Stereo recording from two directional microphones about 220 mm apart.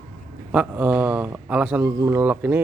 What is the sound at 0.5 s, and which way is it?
Speech, 5° right (ahead or behind).